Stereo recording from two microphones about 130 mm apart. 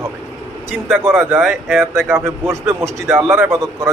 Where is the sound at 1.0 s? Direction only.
15° right (ahead or behind).